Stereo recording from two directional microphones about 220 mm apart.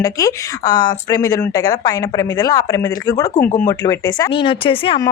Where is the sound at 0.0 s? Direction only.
15° left (ahead or behind).